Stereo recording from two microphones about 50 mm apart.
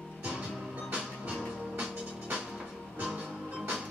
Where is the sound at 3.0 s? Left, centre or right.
Right.